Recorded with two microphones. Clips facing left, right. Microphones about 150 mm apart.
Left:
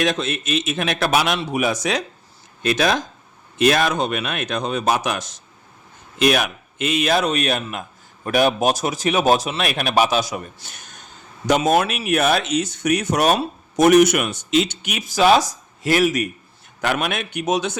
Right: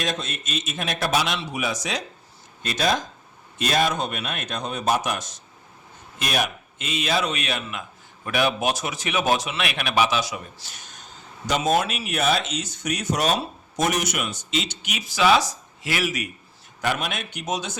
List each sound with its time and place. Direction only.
0.0 s a man's voice: 85° left; by 2.0 s 60° left (ahead or behind)
2.6 s a man's voice: 80° left; by 16.3 s 45° left (ahead or behind)
16.8 s speech: 65° left (ahead or behind)